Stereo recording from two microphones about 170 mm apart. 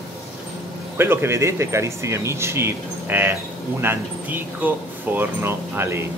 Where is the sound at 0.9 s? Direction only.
15° right (ahead or behind).